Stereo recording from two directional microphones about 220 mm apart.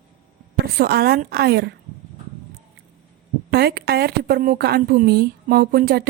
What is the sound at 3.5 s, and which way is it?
A woman's voice, 45° right (ahead or behind).